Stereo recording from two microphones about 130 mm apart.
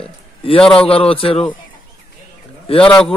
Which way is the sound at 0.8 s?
45° left (ahead or behind).